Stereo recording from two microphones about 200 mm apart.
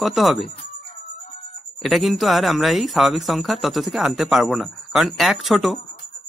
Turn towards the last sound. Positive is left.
turn(degrees=0)  # may be behind; listen again after turning